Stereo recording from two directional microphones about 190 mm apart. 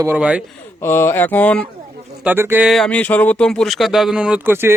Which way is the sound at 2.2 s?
10° right (ahead or behind).